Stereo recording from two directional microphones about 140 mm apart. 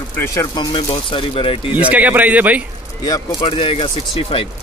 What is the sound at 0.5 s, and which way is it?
Speech, 30° left (ahead or behind).